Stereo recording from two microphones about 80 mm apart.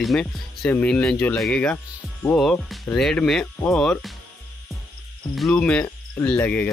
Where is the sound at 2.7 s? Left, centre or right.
Centre.